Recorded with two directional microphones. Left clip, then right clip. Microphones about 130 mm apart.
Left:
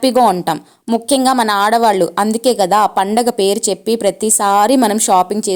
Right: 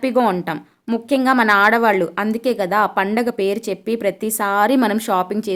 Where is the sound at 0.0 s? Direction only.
30° left (ahead or behind).